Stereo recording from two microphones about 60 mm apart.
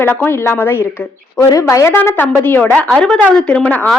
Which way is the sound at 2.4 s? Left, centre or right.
Left.